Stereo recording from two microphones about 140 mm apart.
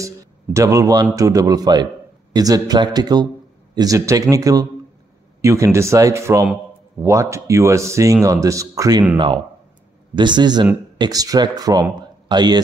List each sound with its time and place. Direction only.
0.0 s a man's voice: 20° right (ahead or behind)
6.4 s a sound: 10° right (ahead or behind)
7.1 s speech: 20° right (ahead or behind)
9.1 s a man's voice: 35° right (ahead or behind)